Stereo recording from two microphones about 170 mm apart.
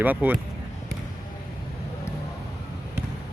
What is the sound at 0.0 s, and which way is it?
Speech, 10° right (ahead or behind).